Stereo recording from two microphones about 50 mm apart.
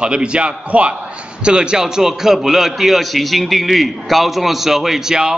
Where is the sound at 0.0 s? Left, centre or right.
Centre.